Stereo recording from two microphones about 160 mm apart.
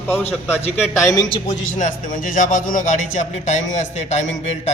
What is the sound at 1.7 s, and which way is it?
A man's voice, 55° left (ahead or behind).